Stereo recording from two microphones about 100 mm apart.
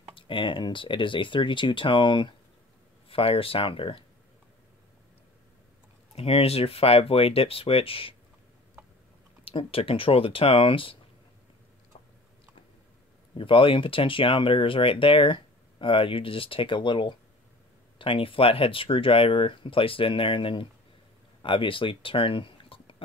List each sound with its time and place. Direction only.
0.1 s speech: 60° left (ahead or behind)
3.1 s speech: 70° left (ahead or behind)
6.1 s speech: 80° left
9.4 s speech: 70° left (ahead or behind)
13.4 s speech: 60° left (ahead or behind)